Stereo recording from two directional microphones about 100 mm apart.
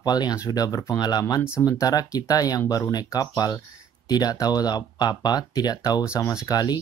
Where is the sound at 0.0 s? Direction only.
40° left (ahead or behind).